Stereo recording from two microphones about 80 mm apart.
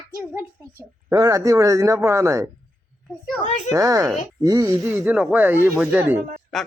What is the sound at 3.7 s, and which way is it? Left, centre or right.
Speech, right.